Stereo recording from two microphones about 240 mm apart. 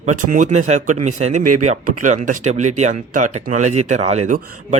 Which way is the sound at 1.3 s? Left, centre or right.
Right.